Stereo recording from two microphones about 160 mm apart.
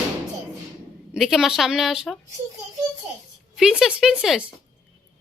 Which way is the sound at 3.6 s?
5° right (ahead or behind).